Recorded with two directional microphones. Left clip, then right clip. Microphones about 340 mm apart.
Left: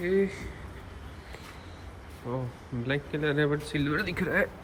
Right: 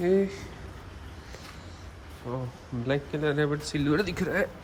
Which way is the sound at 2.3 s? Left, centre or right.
Centre.